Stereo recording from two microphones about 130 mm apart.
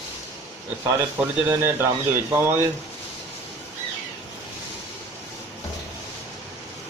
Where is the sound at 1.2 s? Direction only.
15° right (ahead or behind).